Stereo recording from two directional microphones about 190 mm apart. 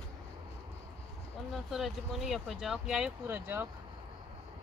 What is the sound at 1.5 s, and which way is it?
Speech, centre (ahead or behind).